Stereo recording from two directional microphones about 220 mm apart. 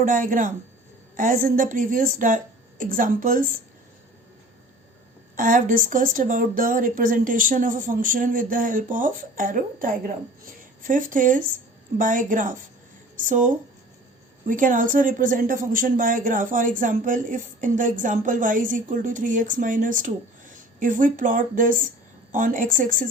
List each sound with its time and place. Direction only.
0.0 s a woman's voice: 40° right (ahead or behind)
5.4 s a woman's voice: 35° right (ahead or behind)